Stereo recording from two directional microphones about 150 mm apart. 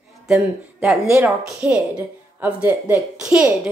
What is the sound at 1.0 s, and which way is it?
Speech, 20° right (ahead or behind).